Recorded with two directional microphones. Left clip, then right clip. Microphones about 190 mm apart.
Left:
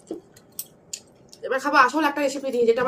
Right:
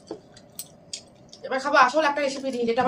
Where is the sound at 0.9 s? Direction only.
20° left (ahead or behind).